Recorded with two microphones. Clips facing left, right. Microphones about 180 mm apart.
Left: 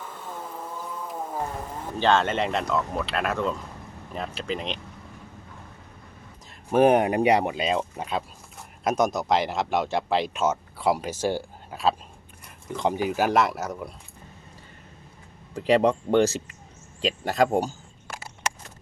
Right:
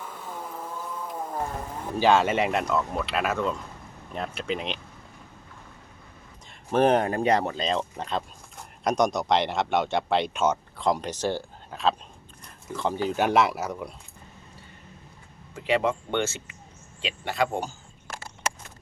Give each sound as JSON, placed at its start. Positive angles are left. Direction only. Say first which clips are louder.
{"t": 0.0, "sound": "vehicle", "louder": "even", "side_deg": -5}
{"t": 2.0, "sound": "speech", "louder": "right 1 dB", "side_deg": -10}
{"t": 6.5, "sound": "speech", "louder": "left 3 dB", "side_deg": 10}
{"t": 15.5, "sound": "speech", "louder": "left 4 dB", "side_deg": 35}